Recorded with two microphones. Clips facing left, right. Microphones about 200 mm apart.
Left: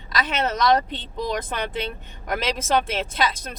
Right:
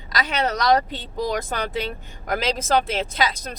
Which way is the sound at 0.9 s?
45° right (ahead or behind).